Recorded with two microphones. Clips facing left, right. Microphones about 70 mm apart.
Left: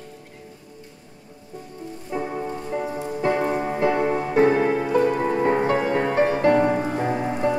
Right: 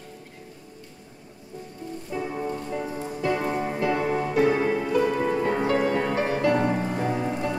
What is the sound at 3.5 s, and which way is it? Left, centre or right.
Music, left.